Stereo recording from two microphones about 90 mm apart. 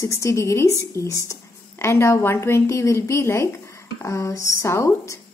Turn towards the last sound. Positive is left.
turn(degrees=35)  # may be behind; listen again after turning